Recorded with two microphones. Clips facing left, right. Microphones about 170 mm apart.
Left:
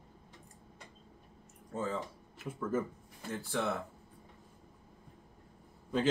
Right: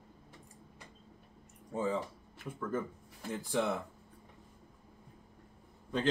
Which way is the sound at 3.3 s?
15° right (ahead or behind).